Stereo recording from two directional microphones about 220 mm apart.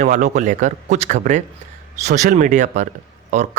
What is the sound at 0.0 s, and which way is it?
Speech, 35° right (ahead or behind).